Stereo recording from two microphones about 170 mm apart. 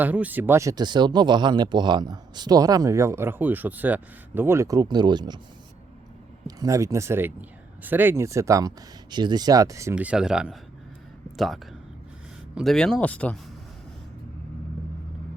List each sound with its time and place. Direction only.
0.0 s speech: 10° right (ahead or behind); by 5.4 s 25° right (ahead or behind)
6.6 s speech: 20° right (ahead or behind)
9.9 s speech: 5° right (ahead or behind)